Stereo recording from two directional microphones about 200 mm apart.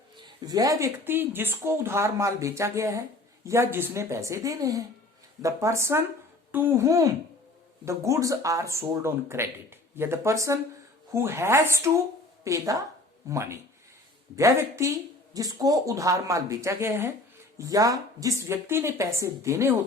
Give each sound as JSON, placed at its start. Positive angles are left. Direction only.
{"t": 0.2, "sound": "speech", "side_deg": -20}